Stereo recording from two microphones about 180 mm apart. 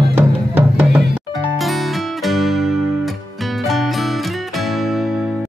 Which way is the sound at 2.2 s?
Centre (ahead or behind).